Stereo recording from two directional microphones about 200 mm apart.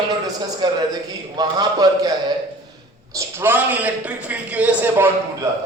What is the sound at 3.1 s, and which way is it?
A man's voice, 10° right (ahead or behind).